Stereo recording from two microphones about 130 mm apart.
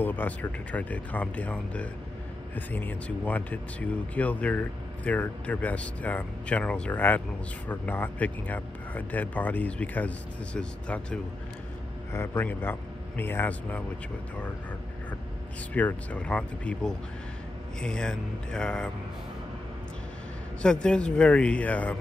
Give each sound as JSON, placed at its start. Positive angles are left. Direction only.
{"t": 0.0, "sound": "speech", "side_deg": 15}
{"t": 15.7, "sound": "speech", "side_deg": 10}
{"t": 20.8, "sound": "speech", "side_deg": 5}